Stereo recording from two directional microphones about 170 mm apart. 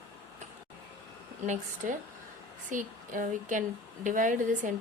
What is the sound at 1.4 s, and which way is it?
A woman's voice, 45° right (ahead or behind).